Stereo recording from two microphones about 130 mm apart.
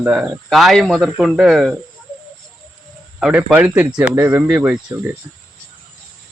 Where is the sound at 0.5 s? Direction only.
Centre (ahead or behind).